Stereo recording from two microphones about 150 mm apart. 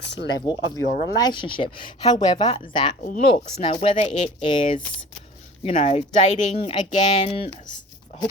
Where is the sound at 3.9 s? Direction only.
50° left (ahead or behind).